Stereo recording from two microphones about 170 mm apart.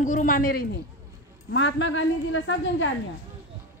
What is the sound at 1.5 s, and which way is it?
A woman's voice, 90° left.